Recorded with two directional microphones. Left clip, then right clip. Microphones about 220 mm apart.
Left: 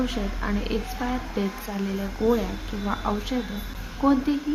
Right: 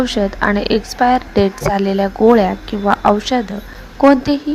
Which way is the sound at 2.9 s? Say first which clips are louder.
Right 15 dB; 35° right (ahead or behind).